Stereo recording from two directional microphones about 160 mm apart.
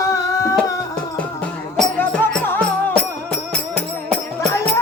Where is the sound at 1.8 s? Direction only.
10° left (ahead or behind).